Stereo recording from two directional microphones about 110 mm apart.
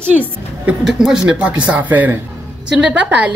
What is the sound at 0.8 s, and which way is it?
Speech, 5° right (ahead or behind).